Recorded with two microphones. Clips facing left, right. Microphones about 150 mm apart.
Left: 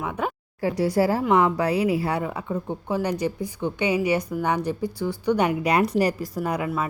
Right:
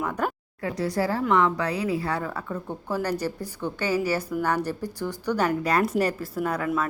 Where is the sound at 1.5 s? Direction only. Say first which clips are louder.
Left 4 dB; 25° left (ahead or behind).